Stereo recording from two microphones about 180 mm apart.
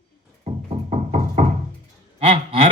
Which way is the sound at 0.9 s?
40° right (ahead or behind).